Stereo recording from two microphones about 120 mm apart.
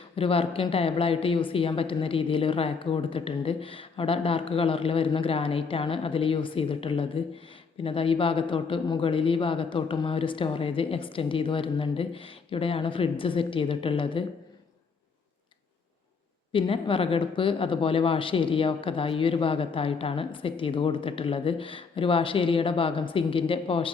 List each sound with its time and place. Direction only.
0.2 s speech: 50° left (ahead or behind)
16.5 s speech: 45° left (ahead or behind)